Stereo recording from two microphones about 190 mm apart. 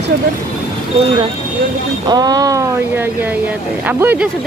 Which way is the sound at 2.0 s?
20° right (ahead or behind).